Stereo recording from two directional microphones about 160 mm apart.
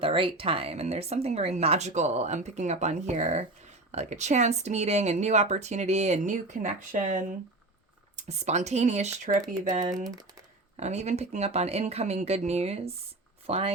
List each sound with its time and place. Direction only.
0.0 s speech: 35° right (ahead or behind); by 9.8 s 55° right (ahead or behind)
9.8 s speech: 25° right (ahead or behind)
10.8 s speech: 45° right (ahead or behind)